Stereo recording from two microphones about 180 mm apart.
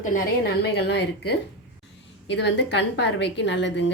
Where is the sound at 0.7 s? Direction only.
70° left (ahead or behind).